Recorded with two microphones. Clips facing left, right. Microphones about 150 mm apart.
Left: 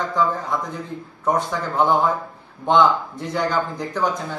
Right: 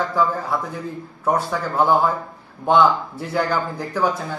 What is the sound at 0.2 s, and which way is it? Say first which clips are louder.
Speech: even; 10° right (ahead or behind).